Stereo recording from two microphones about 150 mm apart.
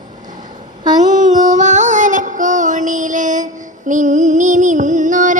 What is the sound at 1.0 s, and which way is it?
Child singing, 60° right (ahead or behind).